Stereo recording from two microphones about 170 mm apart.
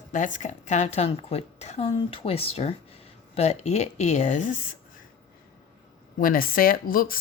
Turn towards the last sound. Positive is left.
turn(degrees=55)  # may be behind; listen again after turning